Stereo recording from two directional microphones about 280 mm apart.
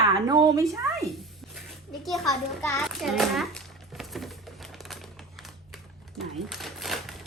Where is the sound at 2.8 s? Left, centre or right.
Centre.